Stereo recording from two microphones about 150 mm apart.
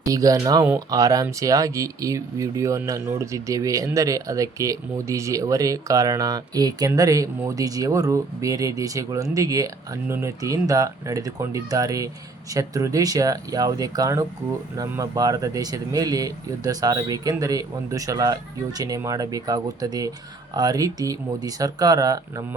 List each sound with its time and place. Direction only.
0.1 s speech: 20° right (ahead or behind)